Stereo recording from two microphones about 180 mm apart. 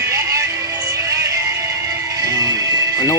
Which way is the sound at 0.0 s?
20° right (ahead or behind).